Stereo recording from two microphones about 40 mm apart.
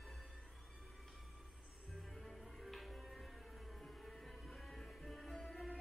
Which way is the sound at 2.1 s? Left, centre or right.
Centre.